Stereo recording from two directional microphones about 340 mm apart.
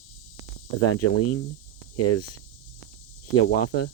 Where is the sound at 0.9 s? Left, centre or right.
Left.